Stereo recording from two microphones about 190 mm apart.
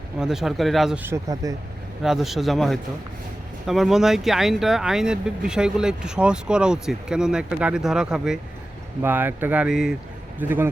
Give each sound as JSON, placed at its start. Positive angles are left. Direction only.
{"t": 0.2, "sound": "speech", "side_deg": 0}
{"t": 1.0, "sound": "speech", "side_deg": -15}
{"t": 2.0, "sound": "speech", "side_deg": 0}